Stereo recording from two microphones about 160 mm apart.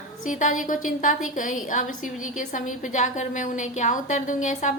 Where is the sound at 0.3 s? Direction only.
50° left (ahead or behind).